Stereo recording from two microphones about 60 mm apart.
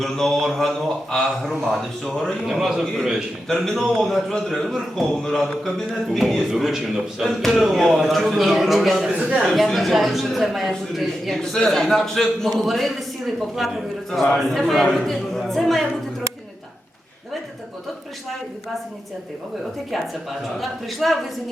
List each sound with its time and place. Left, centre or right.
0.0 s a man's voice: centre
3.5 s a man's voice: centre
9.1 s a man's voice: right
9.5 s a man's voice: centre
20.6 s a man's voice: centre